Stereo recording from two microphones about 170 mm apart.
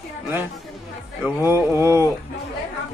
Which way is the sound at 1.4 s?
15° right (ahead or behind).